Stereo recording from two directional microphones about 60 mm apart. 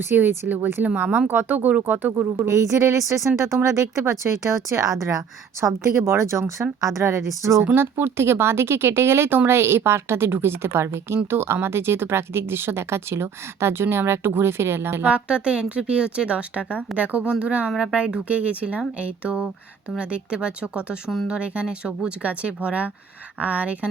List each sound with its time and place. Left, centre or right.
0.1 s a woman's voice: right
1.3 s speech: right
2.5 s speech: right
7.8 s speech: right
15.0 s a woman's voice: right